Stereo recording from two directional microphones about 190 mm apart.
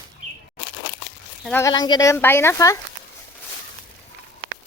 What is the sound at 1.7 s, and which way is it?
Speech, 20° left (ahead or behind).